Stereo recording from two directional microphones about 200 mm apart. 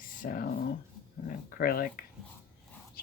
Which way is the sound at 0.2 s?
45° left (ahead or behind).